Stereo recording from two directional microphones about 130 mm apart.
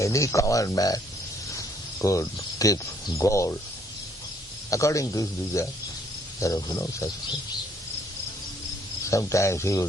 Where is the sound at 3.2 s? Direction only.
25° left (ahead or behind).